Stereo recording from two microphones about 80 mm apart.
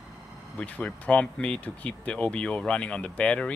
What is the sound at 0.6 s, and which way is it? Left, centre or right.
Speech, centre.